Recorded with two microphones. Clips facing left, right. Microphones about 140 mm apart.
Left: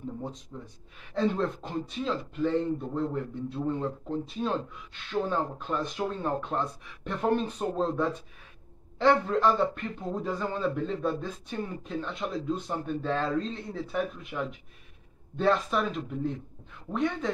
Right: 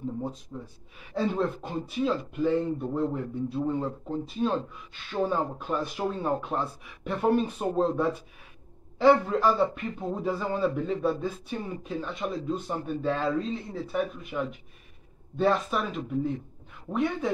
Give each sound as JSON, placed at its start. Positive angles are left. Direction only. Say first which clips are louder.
{"t": 0.5, "sound": "a man's voice", "louder": "right 3 dB", "side_deg": -10}